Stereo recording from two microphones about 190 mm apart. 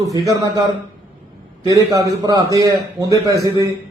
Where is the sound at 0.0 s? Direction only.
15° right (ahead or behind).